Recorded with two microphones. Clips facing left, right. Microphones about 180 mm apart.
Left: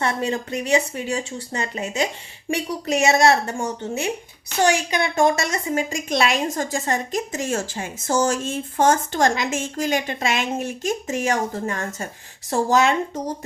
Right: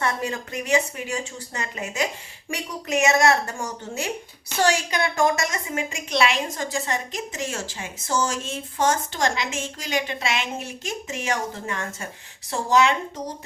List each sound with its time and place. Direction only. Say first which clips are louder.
0.0 s a woman's voice: left 3 dB; 30° left (ahead or behind); by 12.9 s 45° left (ahead or behind)